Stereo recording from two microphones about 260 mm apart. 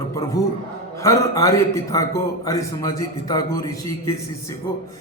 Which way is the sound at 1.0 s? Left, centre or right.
Centre.